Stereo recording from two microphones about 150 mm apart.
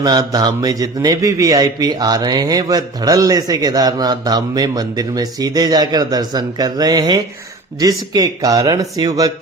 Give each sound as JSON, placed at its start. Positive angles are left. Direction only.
{"t": 0.0, "sound": "a man's voice", "side_deg": -25}